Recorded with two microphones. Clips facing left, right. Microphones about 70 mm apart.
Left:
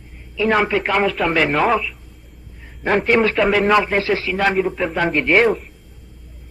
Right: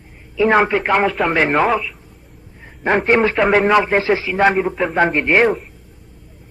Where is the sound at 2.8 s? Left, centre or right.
Right.